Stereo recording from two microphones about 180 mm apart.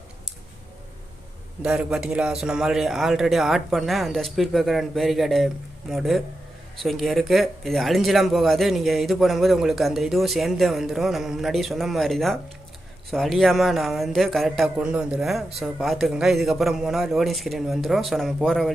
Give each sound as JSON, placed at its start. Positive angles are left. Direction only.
{"t": 1.6, "sound": "speech", "side_deg": -5}